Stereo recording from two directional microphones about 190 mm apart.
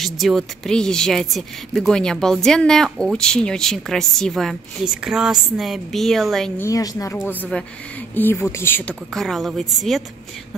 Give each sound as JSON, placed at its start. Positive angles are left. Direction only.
{"t": 0.0, "sound": "speech", "side_deg": 0}
{"t": 6.6, "sound": "speech", "side_deg": 20}